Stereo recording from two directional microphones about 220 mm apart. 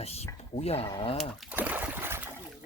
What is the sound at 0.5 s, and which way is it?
Speech, 30° left (ahead or behind).